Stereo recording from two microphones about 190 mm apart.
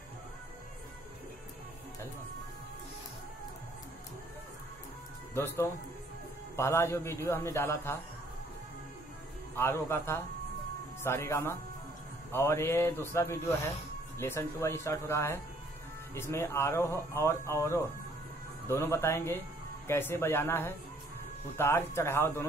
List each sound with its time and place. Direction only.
5.3 s speech: 15° left (ahead or behind)
9.6 s speech: 10° left (ahead or behind)